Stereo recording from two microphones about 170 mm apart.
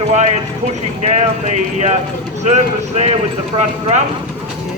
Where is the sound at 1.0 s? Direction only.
40° right (ahead or behind).